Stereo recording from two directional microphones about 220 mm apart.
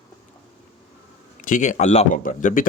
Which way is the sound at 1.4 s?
35° left (ahead or behind).